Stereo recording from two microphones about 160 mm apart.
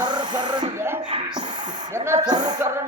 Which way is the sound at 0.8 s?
15° right (ahead or behind).